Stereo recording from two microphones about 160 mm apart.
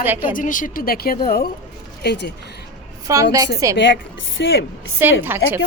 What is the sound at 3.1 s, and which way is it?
Speech, 20° right (ahead or behind).